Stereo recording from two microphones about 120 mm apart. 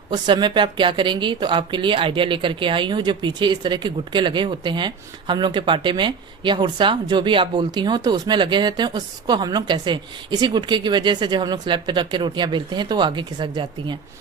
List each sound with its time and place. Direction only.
0.1 s speech: 35° right (ahead or behind)